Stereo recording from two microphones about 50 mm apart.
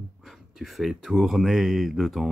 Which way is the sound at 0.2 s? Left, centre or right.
Centre.